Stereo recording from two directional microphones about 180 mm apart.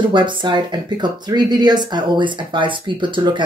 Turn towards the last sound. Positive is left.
turn(degrees=-25)  # may be behind; listen again after turning